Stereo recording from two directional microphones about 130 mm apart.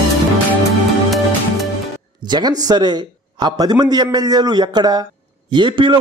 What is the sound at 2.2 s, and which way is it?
A man's voice, 35° right (ahead or behind).